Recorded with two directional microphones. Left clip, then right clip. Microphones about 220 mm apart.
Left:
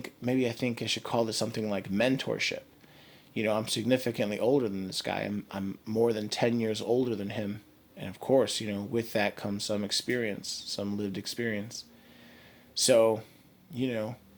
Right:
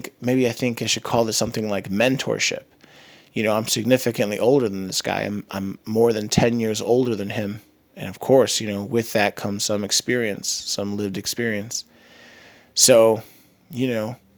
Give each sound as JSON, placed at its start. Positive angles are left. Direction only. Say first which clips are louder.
{"t": 0.0, "sound": "speech", "louder": "right 9 dB", "side_deg": -40}